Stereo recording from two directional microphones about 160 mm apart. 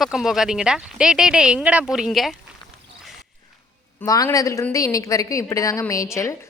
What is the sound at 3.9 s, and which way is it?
A woman's voice, 20° left (ahead or behind).